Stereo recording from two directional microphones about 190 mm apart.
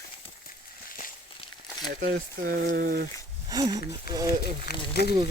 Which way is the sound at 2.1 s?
45° right (ahead or behind).